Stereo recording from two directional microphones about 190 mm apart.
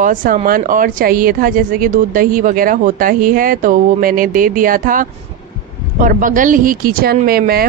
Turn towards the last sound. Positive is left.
turn(degrees=-50)  # may be behind; listen again after turning